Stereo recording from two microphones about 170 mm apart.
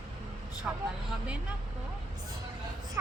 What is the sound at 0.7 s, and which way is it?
Speech, 5° right (ahead or behind).